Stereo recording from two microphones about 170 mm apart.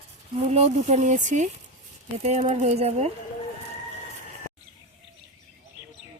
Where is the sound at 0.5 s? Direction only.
40° right (ahead or behind).